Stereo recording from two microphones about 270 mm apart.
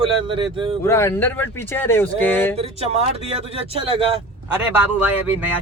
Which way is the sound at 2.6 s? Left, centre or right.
Right.